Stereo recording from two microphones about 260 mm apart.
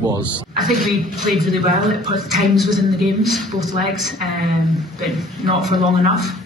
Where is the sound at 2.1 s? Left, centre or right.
Centre.